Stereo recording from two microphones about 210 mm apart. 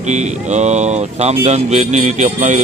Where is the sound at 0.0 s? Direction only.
35° right (ahead or behind).